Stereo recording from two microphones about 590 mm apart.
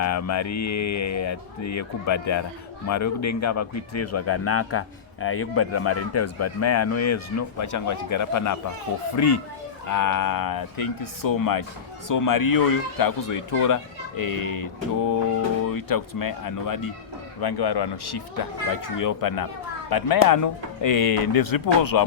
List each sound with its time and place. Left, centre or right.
0.0 s speech: left